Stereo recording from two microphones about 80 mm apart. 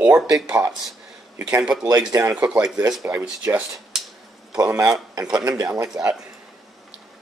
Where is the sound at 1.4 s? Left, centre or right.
Right.